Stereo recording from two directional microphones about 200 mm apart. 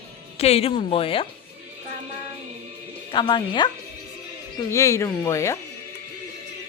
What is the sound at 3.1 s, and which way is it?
Speech, 25° left (ahead or behind).